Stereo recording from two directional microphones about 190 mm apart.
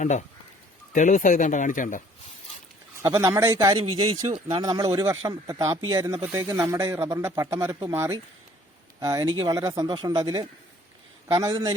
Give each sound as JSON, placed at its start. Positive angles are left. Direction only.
{"t": 0.0, "sound": "speech", "side_deg": 40}
{"t": 3.0, "sound": "a man's voice", "side_deg": -15}